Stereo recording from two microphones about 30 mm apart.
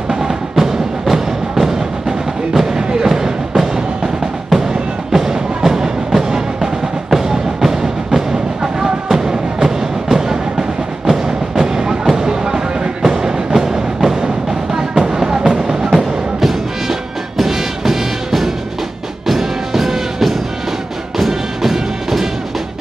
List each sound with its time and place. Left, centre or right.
0.1 s music: centre
5.1 s music: centre
16.0 s music: centre